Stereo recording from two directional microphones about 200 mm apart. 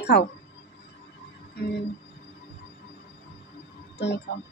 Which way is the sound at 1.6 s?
55° left (ahead or behind).